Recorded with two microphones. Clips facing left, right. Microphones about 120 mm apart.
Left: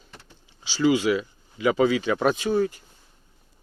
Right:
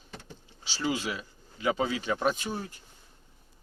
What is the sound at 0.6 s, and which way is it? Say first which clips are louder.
Speech: left 10 dB; 90° left.